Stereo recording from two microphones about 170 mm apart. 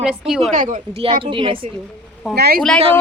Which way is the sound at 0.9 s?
30° right (ahead or behind).